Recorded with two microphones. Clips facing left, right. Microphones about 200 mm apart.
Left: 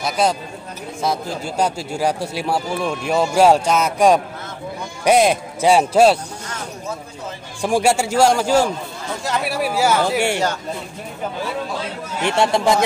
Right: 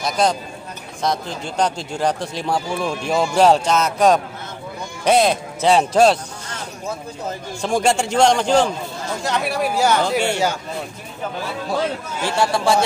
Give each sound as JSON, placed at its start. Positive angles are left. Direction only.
{"t": 0.0, "sound": "a man's voice", "side_deg": 5}
{"t": 7.6, "sound": "a man's voice", "side_deg": 10}
{"t": 12.2, "sound": "a man's voice", "side_deg": 20}